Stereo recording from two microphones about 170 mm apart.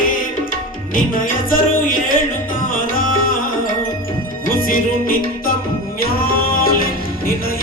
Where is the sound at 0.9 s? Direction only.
55° left (ahead or behind).